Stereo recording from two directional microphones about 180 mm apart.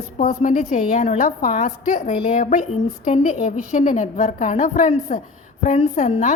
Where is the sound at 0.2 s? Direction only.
45° left (ahead or behind).